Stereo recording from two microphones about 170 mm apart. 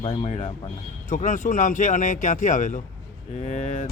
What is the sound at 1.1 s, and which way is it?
Speech, 45° left (ahead or behind).